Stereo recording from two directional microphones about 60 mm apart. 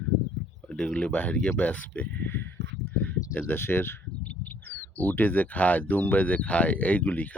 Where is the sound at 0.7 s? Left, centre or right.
Centre; by 2.4 s left.